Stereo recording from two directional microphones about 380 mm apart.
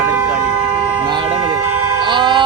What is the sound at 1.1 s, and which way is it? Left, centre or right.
Vehicle, centre.